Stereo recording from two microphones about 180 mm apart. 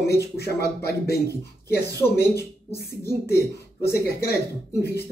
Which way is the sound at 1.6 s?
15° left (ahead or behind).